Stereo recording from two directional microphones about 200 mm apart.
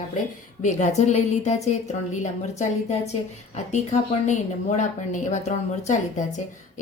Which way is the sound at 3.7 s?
35° left (ahead or behind).